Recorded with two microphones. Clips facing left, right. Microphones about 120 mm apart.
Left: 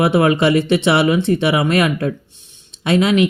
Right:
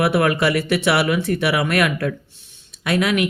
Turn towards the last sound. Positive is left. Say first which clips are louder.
# left 5 dB
turn(degrees=25)  # may be behind; listen again after turning